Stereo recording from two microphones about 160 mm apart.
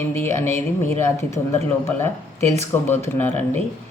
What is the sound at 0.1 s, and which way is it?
Speech, 15° left (ahead or behind).